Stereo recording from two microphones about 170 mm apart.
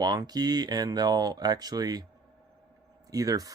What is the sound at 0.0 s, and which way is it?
Speech, 25° right (ahead or behind).